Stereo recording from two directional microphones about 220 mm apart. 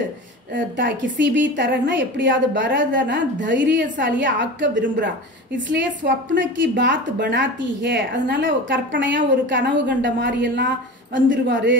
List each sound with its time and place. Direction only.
0.6 s a woman's voice: 55° right (ahead or behind)